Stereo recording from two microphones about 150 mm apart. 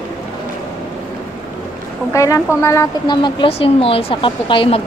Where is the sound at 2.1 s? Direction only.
20° left (ahead or behind).